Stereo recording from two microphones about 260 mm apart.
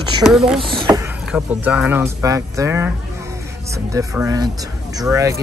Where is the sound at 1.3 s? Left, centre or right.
Centre.